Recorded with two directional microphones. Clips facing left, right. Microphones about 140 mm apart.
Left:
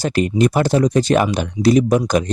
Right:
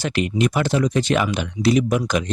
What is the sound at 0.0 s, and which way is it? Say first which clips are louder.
Speech: left 4 dB; 40° left (ahead or behind).